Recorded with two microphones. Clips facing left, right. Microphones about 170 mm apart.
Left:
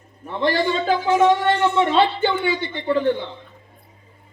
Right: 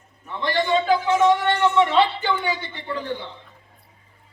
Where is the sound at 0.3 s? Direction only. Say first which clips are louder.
Left 2 dB; 35° left (ahead or behind).